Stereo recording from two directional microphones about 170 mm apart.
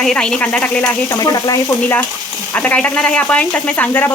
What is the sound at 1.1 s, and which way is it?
Speech, 20° left (ahead or behind).